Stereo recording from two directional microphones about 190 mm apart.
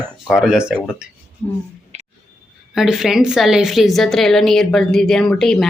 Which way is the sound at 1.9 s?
35° right (ahead or behind).